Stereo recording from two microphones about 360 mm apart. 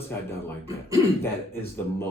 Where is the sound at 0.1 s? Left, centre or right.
Centre.